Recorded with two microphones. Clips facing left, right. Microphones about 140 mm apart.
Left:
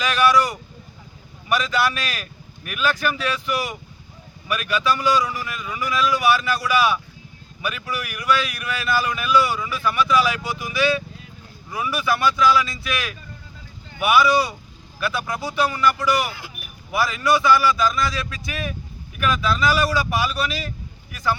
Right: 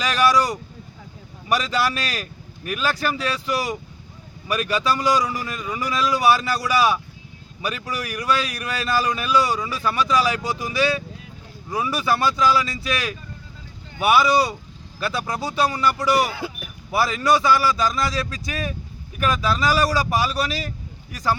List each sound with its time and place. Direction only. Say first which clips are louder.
0.0 s speech: left 1 dB; 35° right (ahead or behind)